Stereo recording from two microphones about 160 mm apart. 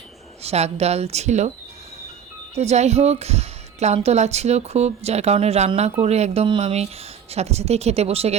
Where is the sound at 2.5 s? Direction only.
45° right (ahead or behind).